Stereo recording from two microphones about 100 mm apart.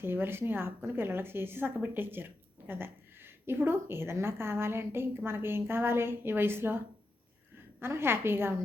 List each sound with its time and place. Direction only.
0.0 s a woman's voice: 20° right (ahead or behind)
7.8 s a woman's voice: 25° right (ahead or behind)